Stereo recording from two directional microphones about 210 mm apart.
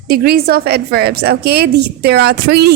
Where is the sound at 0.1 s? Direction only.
45° right (ahead or behind).